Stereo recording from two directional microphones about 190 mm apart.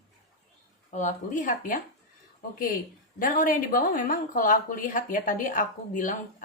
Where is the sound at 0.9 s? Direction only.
40° left (ahead or behind).